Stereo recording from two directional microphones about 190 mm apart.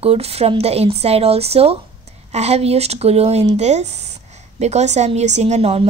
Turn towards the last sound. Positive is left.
turn(degrees=-35)  # may be behind; listen again after turning